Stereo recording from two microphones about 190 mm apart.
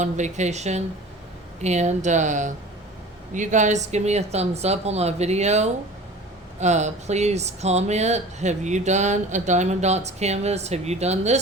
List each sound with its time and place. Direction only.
0.0 s speech: 40° right (ahead or behind)